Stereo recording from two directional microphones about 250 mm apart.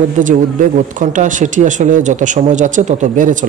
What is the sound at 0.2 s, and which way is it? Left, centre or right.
Speech, right.